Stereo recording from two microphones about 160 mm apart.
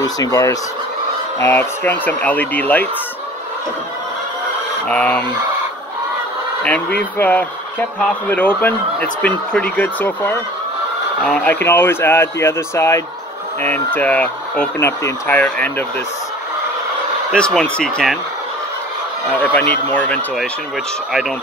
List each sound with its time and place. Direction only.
0.0 s speech: 20° left (ahead or behind)
4.8 s speech: 10° left (ahead or behind)
6.6 s speech: 10° left (ahead or behind)
17.3 s speech: 5° left (ahead or behind)
19.3 s speech: 10° left (ahead or behind)